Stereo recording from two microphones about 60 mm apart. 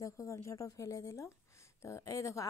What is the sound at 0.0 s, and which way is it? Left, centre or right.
Speech, left.